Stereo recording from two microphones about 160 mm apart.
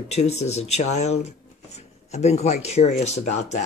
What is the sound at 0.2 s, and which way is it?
Speech, 40° left (ahead or behind).